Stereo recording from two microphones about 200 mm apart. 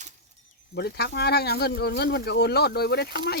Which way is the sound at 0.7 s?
55° left (ahead or behind).